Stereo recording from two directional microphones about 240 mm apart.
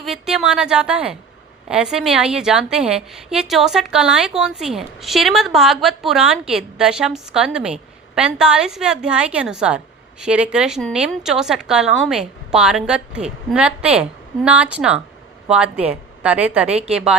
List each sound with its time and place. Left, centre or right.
0.0 s a woman's voice: centre